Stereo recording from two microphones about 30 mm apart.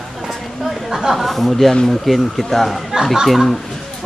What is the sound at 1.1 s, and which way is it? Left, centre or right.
Speech, centre.